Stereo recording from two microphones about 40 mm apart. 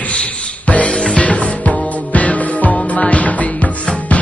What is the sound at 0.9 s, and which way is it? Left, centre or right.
Music, left.